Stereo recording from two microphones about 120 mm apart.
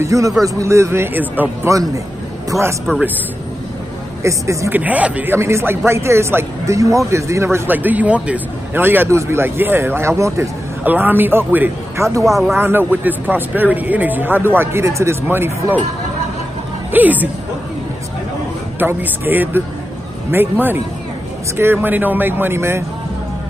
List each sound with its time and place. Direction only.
0.0 s a man's voice: 25° right (ahead or behind)
4.2 s a man's voice: 25° right (ahead or behind)
4.7 s a man's voice: 10° right (ahead or behind)
10.8 s a man's voice: 15° right (ahead or behind)
12.2 s speech: centre (ahead or behind)
12.5 s a man's voice: 15° right (ahead or behind)
16.9 s a man's voice: 15° right (ahead or behind)
18.8 s a man's voice: 15° right (ahead or behind)